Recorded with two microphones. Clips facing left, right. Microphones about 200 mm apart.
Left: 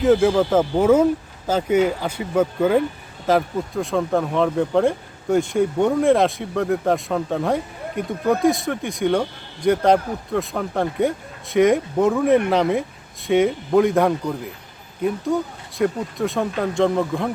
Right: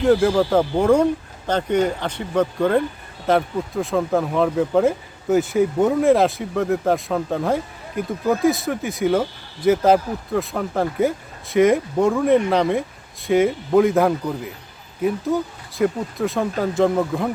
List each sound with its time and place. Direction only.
0.0 s speech: centre (ahead or behind)